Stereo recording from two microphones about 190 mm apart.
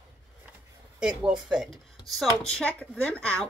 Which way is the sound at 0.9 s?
5° right (ahead or behind).